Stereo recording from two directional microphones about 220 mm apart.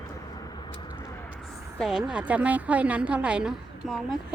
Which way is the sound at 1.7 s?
Centre (ahead or behind).